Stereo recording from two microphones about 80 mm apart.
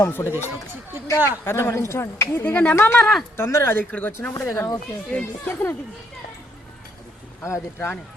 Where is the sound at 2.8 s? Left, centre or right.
Left.